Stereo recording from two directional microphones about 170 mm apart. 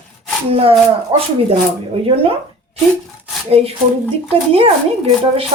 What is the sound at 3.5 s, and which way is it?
Speech, 35° right (ahead or behind).